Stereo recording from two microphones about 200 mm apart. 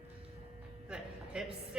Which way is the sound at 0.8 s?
5° right (ahead or behind).